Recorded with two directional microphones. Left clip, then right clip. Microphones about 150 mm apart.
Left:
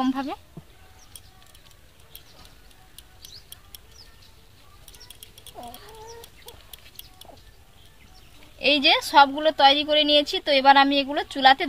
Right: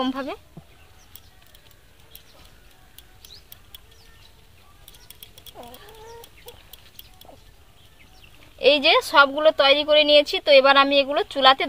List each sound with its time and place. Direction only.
0.0 s speech: 40° right (ahead or behind)
8.5 s a woman's voice: 45° right (ahead or behind)